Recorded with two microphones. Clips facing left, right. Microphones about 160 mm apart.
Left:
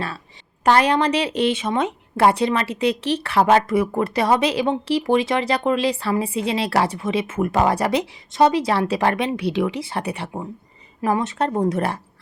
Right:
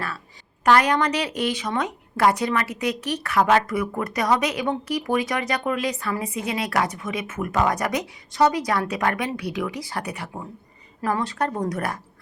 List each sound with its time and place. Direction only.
0.6 s a woman's voice: 25° left (ahead or behind)